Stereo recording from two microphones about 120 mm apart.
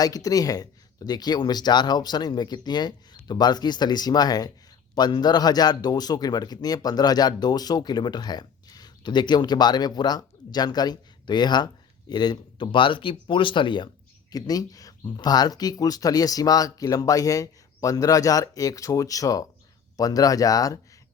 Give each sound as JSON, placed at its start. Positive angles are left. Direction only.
{"t": 0.0, "sound": "speech", "side_deg": 30}